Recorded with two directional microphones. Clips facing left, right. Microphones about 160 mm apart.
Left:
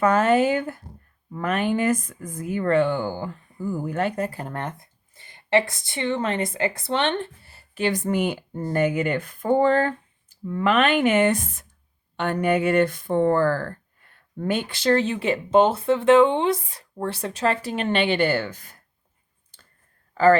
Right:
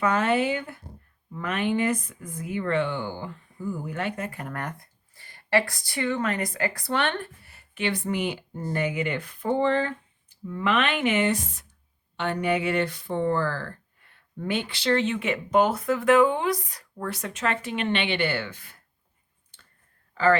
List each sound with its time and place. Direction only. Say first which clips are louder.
0.0 s speech: left 5 dB; 45° left (ahead or behind)
19.5 s clicking: left 2 dB; 40° left (ahead or behind)
20.1 s speech: left 5 dB; 40° left (ahead or behind)